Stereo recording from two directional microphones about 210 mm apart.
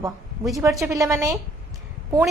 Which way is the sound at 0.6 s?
15° right (ahead or behind).